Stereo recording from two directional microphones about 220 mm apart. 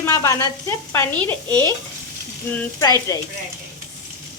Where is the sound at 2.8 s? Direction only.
15° left (ahead or behind).